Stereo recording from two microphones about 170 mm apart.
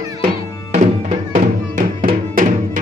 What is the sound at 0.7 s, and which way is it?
Music, 45° right (ahead or behind).